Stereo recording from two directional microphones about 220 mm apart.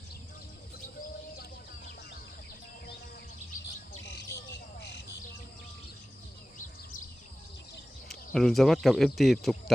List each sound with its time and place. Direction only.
4.8 s bird: 50° left (ahead or behind)
8.0 s speech: centre (ahead or behind)